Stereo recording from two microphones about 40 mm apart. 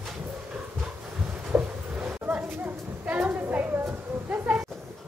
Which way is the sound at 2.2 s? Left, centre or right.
Right.